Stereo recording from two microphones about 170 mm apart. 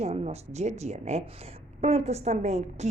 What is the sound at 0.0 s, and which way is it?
Speech, 40° right (ahead or behind).